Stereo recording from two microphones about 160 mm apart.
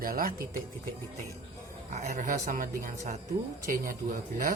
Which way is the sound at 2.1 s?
55° right (ahead or behind).